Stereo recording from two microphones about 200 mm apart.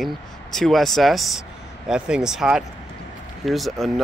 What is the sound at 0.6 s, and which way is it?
Speech, centre (ahead or behind).